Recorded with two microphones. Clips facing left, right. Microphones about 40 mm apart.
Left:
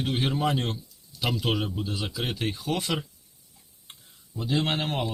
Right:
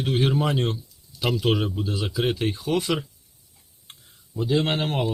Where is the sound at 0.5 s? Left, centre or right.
Right.